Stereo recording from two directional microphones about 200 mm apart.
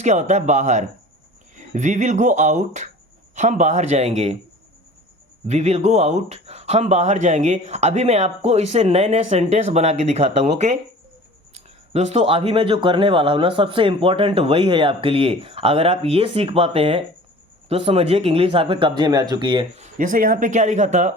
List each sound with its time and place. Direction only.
0.0 s speech: 35° right (ahead or behind)
5.5 s speech: 35° right (ahead or behind)
11.5 s speech: 35° right (ahead or behind)